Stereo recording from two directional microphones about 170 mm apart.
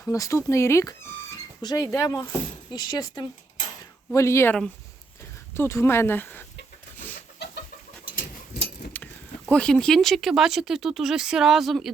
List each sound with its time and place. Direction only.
0.0 s speech: 20° left (ahead or behind)
5.5 s speech: 15° left (ahead or behind)
6.9 s chicken: 10° left (ahead or behind)
7.4 s chicken: 75° left (ahead or behind)
8.9 s keys jangling: 10° left (ahead or behind)
9.5 s speech: 5° left (ahead or behind)